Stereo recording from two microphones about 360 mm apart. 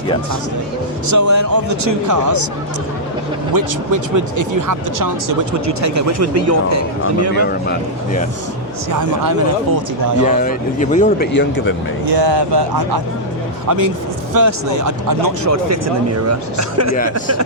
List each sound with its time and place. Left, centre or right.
1.0 s speech: right
3.5 s speech: right
7.3 s speech: left
8.9 s speech: right
10.2 s speech: left
12.0 s speech: right
13.7 s speech: right